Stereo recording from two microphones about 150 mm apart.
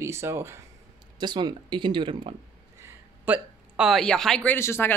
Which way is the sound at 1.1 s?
30° right (ahead or behind).